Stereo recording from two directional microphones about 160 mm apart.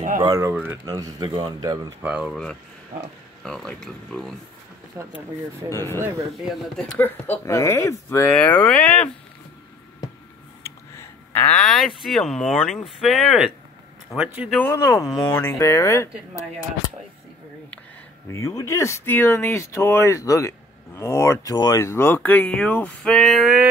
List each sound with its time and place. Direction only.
0.2 s speech: 20° right (ahead or behind)
2.0 s speech: 5° right (ahead or behind)
3.4 s speech: 5° left (ahead or behind)
4.9 s speech: 15° right (ahead or behind)
5.7 s speech: 15° left (ahead or behind)
10.6 s a sound: 15° left (ahead or behind)
12.0 s speech: centre (ahead or behind)
14.7 s speech: 20° left (ahead or behind)
18.3 s speech: 20° left (ahead or behind); by 23.7 s 5° right (ahead or behind)